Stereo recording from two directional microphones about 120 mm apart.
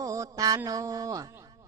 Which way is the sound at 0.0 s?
25° right (ahead or behind).